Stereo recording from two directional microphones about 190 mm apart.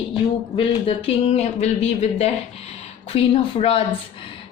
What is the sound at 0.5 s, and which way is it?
A woman's voice, 30° left (ahead or behind).